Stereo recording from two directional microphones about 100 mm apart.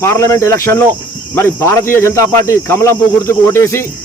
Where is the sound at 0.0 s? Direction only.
30° left (ahead or behind).